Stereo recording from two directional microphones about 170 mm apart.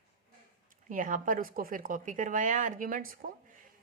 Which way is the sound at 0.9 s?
50° right (ahead or behind).